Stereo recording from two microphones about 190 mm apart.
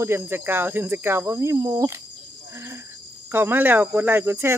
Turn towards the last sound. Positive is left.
turn(degrees=-15)  # may be behind; listen again after turning